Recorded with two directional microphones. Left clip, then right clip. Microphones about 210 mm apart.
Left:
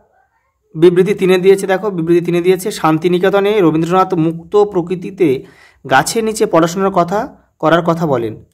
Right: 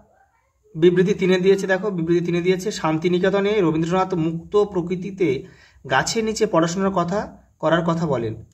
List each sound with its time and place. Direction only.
0.7 s a man's voice: 35° left (ahead or behind)